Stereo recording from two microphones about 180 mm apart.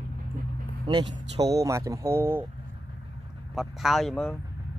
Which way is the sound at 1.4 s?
20° right (ahead or behind).